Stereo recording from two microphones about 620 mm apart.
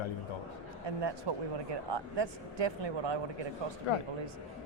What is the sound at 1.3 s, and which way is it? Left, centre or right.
Speech, right.